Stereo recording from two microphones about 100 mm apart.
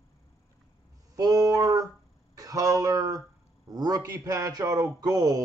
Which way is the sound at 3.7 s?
35° right (ahead or behind).